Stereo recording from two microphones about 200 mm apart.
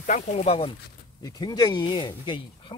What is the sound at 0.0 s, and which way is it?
Speech, 35° left (ahead or behind).